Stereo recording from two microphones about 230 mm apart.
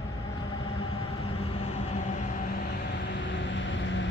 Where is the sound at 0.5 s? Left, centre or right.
Left.